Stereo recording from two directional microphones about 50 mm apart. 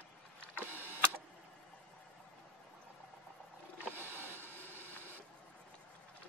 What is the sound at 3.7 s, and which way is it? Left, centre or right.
Boat, right.